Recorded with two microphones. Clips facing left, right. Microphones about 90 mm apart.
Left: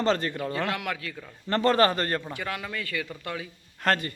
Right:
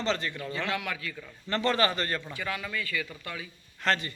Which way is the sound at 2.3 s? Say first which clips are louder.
Left 1 dB; 55° left (ahead or behind).